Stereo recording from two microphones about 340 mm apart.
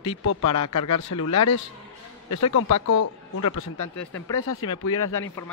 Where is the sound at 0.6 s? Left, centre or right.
Left.